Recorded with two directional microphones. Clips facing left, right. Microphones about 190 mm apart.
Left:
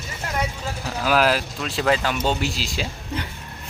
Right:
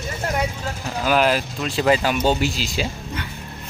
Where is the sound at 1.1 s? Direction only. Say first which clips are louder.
Right 1 dB; centre (ahead or behind).